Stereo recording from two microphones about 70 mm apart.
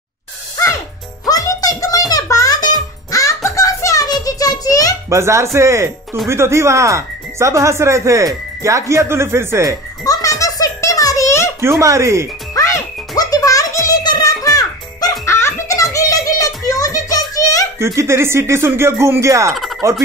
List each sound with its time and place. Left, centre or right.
1.2 s music: left
2.5 s music: left
3.2 s music: left
4.2 s a sound: left
5.1 s speech: right
10.1 s music: left
11.8 s speech: right
12.5 s music: left
14.4 s music: left
15.2 s music: left
15.7 s a sound: left
17.7 s speech: right
19.5 s a sound: centre